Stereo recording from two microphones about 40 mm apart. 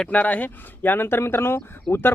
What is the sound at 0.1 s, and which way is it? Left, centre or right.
Speech, left.